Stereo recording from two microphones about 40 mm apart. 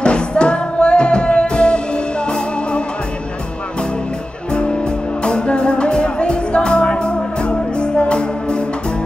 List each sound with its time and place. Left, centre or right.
0.0 s music: left
5.2 s music: left